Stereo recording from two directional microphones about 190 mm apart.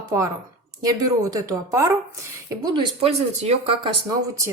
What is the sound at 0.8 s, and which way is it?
A woman's voice, 20° right (ahead or behind).